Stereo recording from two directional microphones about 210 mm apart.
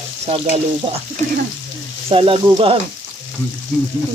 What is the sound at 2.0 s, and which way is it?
Frying, 25° right (ahead or behind).